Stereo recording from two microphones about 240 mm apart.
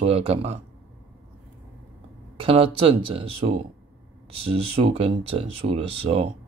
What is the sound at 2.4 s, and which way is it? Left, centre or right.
Speech, right.